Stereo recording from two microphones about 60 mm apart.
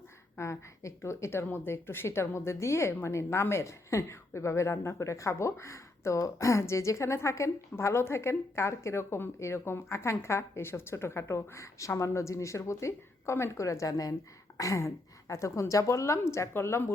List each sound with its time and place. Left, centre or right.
0.3 s speech: left
14.6 s a woman's voice: left